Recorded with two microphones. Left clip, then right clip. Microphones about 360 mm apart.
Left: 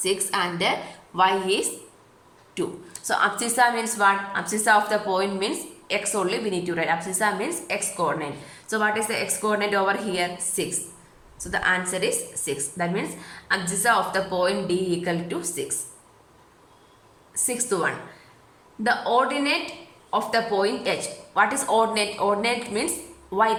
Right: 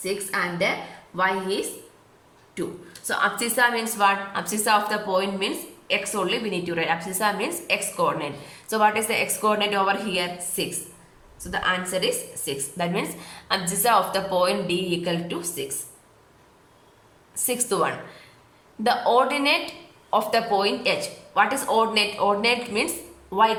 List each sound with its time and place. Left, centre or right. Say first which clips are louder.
0.0 s a woman's voice: left 2 dB; centre
17.3 s a woman's voice: right 1 dB; centre